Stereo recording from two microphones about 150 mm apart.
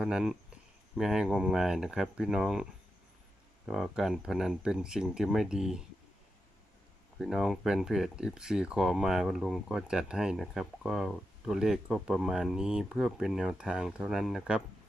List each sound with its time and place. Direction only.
0.0 s speech: 5° right (ahead or behind)
3.7 s speech: centre (ahead or behind)
7.2 s speech: centre (ahead or behind)